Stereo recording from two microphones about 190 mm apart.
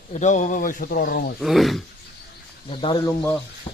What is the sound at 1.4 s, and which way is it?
Speech, centre (ahead or behind).